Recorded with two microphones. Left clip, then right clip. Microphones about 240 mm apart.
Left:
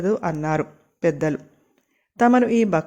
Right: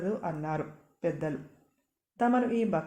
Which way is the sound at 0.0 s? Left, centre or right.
Left.